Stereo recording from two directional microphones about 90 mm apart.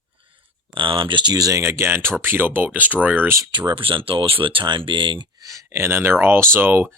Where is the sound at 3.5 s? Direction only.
60° right (ahead or behind).